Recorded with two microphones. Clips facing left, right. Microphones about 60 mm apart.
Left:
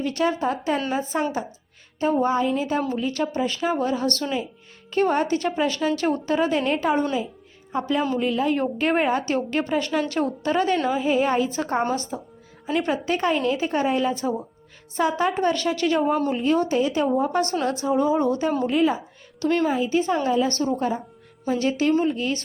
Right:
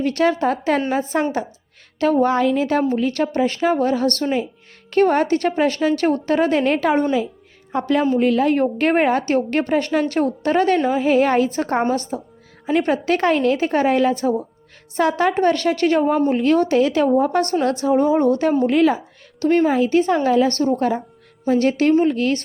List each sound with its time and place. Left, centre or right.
0.0 s a woman's voice: right
2.2 s speech: right
2.9 s a woman's voice: right
16.3 s a woman's voice: right
17.2 s a woman's voice: right
19.4 s a woman's voice: right
19.7 s a woman's voice: right